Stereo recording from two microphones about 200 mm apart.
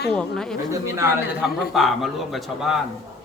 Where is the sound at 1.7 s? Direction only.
Centre (ahead or behind).